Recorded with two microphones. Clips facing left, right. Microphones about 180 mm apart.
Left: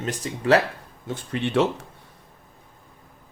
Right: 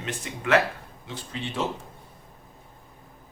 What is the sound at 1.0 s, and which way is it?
Speech, 55° left (ahead or behind).